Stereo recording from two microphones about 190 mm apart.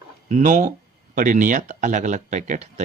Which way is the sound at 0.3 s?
40° right (ahead or behind).